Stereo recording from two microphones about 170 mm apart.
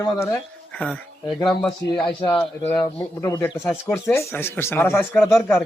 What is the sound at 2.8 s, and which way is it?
A man's voice, 20° left (ahead or behind).